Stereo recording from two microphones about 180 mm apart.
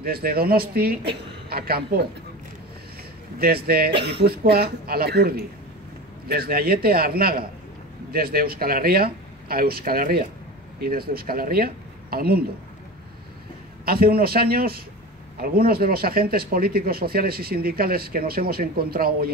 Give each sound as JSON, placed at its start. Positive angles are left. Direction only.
{"t": 0.0, "sound": "speech", "side_deg": -55}
{"t": 3.3, "sound": "speech", "side_deg": -60}
{"t": 13.8, "sound": "speech", "side_deg": -55}